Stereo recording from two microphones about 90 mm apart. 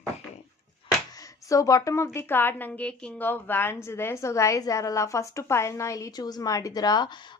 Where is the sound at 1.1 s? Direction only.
40° left (ahead or behind).